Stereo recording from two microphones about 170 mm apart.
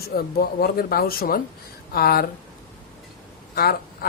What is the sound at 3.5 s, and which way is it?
Speech, 65° left (ahead or behind).